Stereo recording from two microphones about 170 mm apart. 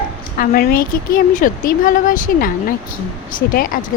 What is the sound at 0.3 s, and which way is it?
Speech, 60° left (ahead or behind).